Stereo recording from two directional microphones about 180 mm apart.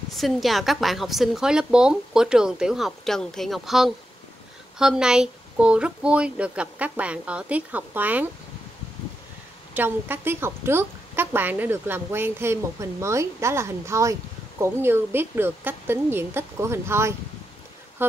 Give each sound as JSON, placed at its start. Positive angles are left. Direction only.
{"t": 0.1, "sound": "a woman's voice", "side_deg": 0}
{"t": 9.8, "sound": "speech", "side_deg": -10}